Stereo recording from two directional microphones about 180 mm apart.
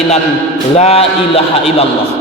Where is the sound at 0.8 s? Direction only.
35° left (ahead or behind).